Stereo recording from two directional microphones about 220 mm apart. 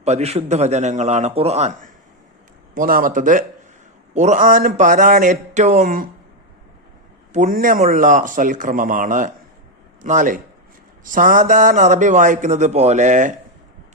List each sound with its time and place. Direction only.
0.0 s a man's voice: 30° right (ahead or behind)
7.3 s a man's voice: 35° right (ahead or behind)